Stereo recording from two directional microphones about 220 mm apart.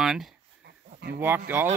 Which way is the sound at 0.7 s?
45° right (ahead or behind).